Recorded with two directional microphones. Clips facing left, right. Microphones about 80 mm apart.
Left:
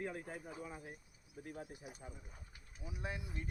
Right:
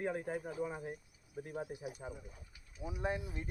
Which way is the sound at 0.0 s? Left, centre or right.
Right.